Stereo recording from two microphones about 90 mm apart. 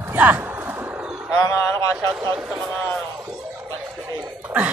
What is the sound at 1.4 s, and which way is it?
Speech, 35° left (ahead or behind).